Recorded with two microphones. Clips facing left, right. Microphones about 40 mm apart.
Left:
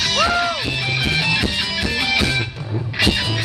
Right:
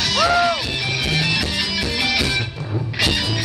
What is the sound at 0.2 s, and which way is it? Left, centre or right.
Music, centre.